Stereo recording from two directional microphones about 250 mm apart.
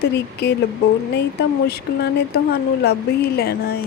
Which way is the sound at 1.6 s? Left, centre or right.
Left.